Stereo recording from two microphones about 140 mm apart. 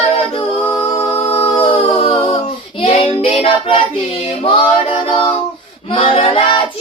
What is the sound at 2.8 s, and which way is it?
Child singing, 45° left (ahead or behind).